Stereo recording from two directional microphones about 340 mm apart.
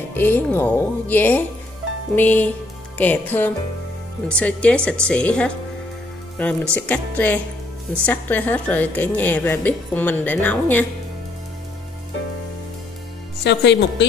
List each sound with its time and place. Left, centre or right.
0.1 s a woman's voice: centre
13.4 s a woman's voice: left